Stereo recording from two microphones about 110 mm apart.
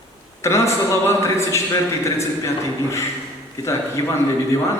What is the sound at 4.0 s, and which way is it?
Speech, 30° left (ahead or behind).